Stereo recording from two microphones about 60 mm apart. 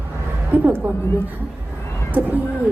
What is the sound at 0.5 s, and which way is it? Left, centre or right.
Speech, right.